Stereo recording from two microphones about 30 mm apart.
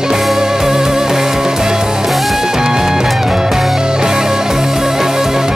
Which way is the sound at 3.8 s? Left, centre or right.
Right.